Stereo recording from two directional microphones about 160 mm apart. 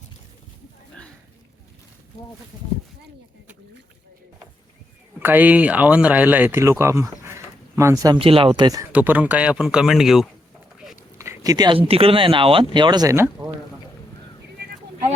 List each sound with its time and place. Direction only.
5.2 s speech: 10° right (ahead or behind)
8.2 s speech: 35° right (ahead or behind)
8.9 s speech: 10° right (ahead or behind)
11.2 s speech: 20° right (ahead or behind)